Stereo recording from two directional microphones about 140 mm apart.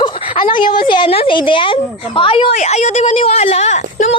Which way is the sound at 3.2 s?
45° left (ahead or behind).